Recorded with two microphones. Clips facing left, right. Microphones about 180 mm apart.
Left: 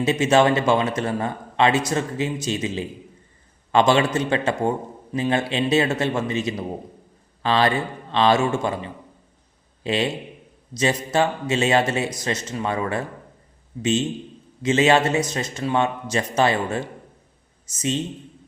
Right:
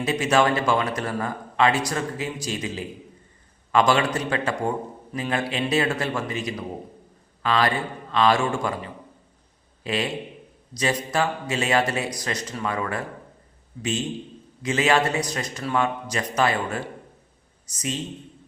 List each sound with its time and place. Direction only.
0.0 s a man's voice: 25° left (ahead or behind)
9.8 s a man's voice: 25° left (ahead or behind)
14.6 s a man's voice: 25° left (ahead or behind)